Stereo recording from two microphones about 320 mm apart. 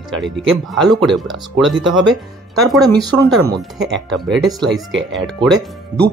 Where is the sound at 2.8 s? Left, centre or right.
Centre.